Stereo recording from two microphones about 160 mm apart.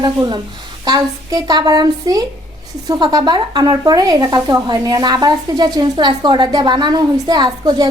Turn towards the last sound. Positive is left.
turn(degrees=-25)  # may be behind; listen again after turning